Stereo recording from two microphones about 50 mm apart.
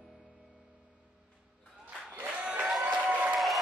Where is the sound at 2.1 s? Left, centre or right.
Right.